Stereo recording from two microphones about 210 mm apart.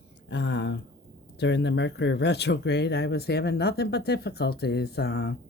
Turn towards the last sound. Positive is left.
turn(degrees=50)  # may be behind; listen again after turning